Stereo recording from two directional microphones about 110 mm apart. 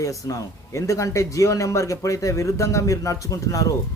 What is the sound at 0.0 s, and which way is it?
Speech, 30° left (ahead or behind).